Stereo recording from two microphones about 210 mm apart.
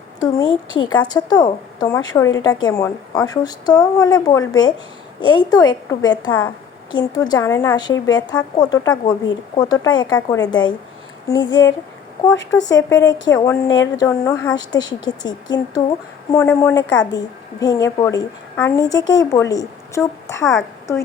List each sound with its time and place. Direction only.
0.2 s a woman's voice: 20° left (ahead or behind)
20.4 s a woman's voice: centre (ahead or behind)